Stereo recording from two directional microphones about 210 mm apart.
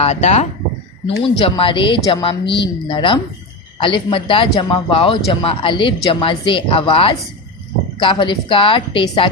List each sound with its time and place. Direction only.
0.0 s a man's voice: 30° left (ahead or behind)